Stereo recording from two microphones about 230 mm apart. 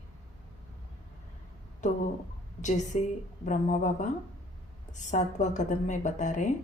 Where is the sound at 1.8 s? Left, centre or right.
Left.